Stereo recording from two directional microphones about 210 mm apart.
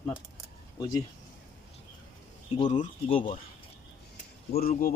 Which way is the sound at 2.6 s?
35° left (ahead or behind).